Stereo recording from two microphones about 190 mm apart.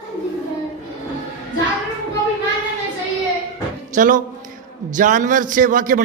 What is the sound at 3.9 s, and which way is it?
A man's voice, 45° right (ahead or behind).